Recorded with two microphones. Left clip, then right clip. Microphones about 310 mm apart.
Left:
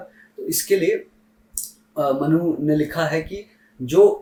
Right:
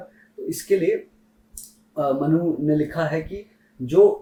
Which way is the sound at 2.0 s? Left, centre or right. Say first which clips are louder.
Left 2 dB; centre.